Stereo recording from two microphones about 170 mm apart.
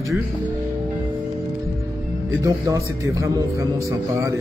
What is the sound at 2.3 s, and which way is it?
Speech, 20° right (ahead or behind).